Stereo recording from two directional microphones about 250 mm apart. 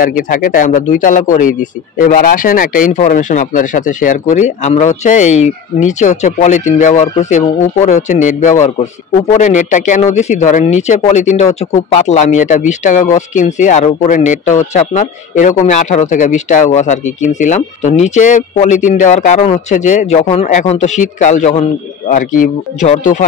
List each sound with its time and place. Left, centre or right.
0.0 s speech: left